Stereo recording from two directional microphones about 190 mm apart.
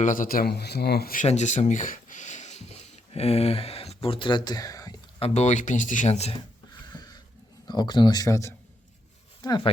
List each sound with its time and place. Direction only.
0.0 s speech: 45° left (ahead or behind); by 4.9 s 20° left (ahead or behind)
5.2 s speech: 35° left (ahead or behind)
6.9 s a sound: 20° left (ahead or behind)
7.7 s speech: 20° left (ahead or behind)